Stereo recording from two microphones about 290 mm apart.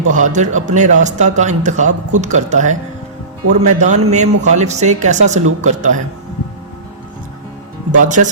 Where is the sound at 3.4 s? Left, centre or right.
Right.